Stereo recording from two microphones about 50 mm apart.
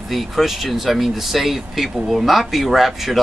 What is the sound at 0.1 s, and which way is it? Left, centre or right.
Speech, centre.